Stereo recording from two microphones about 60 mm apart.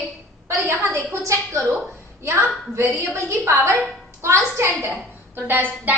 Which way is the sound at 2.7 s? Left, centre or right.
Right.